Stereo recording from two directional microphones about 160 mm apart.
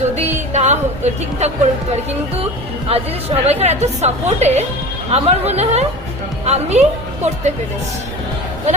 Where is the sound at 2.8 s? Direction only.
40° right (ahead or behind).